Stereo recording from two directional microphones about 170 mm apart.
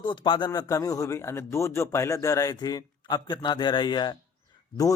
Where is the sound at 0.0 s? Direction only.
25° left (ahead or behind).